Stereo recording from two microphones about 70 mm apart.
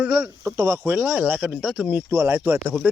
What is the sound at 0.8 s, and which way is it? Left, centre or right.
Speech, right.